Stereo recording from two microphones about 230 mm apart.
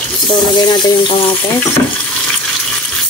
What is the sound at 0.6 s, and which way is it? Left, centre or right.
Frying, left.